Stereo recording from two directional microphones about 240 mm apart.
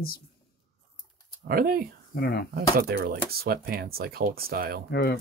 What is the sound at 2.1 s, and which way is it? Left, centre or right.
Speech, left.